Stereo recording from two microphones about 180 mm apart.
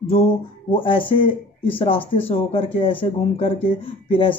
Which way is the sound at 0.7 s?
30° left (ahead or behind).